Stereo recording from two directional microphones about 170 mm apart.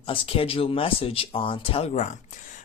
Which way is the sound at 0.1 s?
35° left (ahead or behind).